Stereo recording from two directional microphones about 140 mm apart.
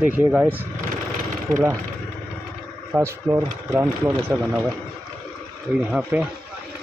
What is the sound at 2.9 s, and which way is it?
Speech, 20° right (ahead or behind).